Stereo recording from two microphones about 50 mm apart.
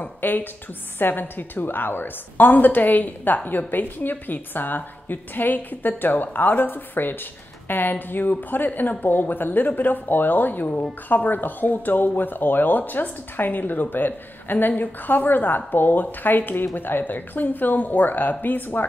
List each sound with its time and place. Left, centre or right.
0.0 s speech: left